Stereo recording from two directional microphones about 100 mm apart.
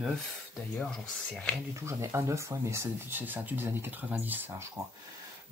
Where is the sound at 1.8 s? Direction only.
30° right (ahead or behind).